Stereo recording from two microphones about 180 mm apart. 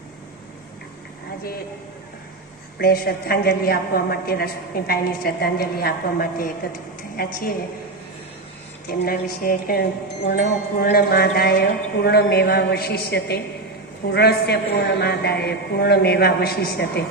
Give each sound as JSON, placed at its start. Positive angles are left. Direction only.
{"t": 2.7, "sound": "a woman's voice", "side_deg": 60}
{"t": 8.9, "sound": "a woman's voice", "side_deg": 55}